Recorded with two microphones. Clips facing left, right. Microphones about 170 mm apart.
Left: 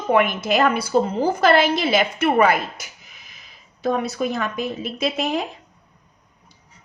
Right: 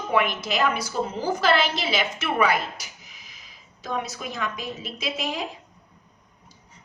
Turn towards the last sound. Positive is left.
turn(degrees=60)  # may be behind; listen again after turning